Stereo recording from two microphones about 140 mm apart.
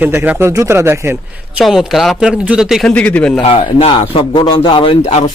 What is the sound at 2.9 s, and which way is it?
Speech, 10° left (ahead or behind).